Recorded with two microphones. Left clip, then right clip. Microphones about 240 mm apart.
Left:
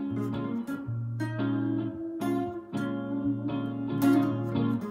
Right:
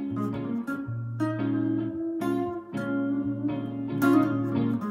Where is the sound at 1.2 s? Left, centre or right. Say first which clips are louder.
Right 4 dB; centre.